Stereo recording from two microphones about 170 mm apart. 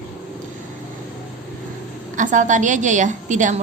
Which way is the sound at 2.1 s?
50° right (ahead or behind).